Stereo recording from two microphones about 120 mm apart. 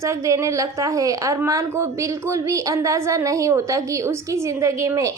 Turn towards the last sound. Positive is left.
turn(degrees=-25)  # may be behind; listen again after turning